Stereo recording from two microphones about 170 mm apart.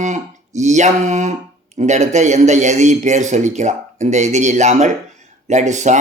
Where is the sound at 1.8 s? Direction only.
45° right (ahead or behind).